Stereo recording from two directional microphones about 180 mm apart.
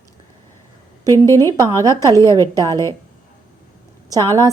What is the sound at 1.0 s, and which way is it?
A woman's voice, 15° left (ahead or behind).